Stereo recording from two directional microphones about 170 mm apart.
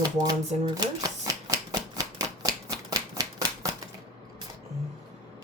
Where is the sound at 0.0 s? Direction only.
25° right (ahead or behind).